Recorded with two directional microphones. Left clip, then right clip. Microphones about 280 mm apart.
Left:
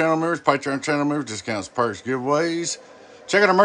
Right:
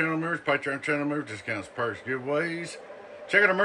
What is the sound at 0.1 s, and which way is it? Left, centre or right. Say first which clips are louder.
Speech: left 7 dB; left.